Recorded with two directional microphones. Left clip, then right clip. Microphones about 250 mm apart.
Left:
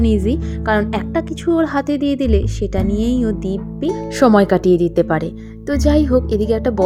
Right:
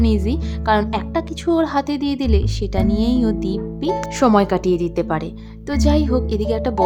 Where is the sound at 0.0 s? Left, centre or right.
Centre.